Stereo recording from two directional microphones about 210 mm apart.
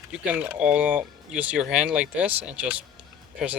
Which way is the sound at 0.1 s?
5° right (ahead or behind).